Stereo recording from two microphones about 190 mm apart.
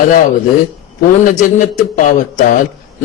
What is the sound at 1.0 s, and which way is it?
A man's voice, 45° left (ahead or behind).